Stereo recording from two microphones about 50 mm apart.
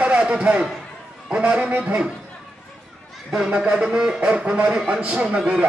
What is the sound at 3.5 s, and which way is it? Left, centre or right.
Speech, right.